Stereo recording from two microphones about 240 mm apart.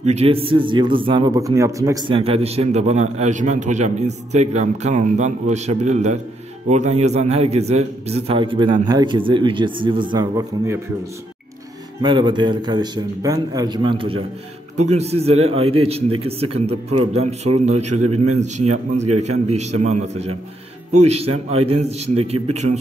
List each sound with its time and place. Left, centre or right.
0.1 s a man's voice: right
12.0 s a man's voice: centre
18.0 s a man's voice: right
19.4 s a man's voice: right
21.3 s a man's voice: right
21.6 s a man's voice: right